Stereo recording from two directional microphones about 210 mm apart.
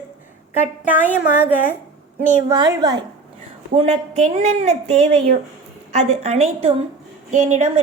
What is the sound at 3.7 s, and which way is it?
A woman's voice, 30° right (ahead or behind).